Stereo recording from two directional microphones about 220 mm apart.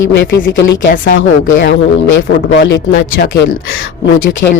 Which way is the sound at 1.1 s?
55° left (ahead or behind).